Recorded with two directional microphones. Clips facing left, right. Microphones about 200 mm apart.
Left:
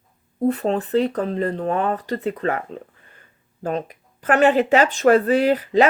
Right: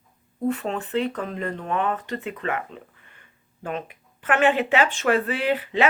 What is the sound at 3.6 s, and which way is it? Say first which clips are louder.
Speech: left 6 dB; 40° left (ahead or behind).